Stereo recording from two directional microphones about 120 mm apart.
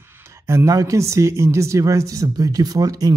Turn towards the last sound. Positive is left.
turn(degrees=-30)  # may be behind; listen again after turning